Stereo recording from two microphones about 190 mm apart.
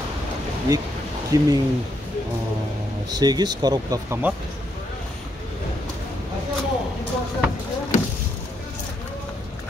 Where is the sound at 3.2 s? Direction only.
20° right (ahead or behind).